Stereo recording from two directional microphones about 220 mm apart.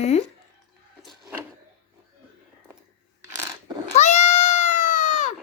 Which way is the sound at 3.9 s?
30° left (ahead or behind).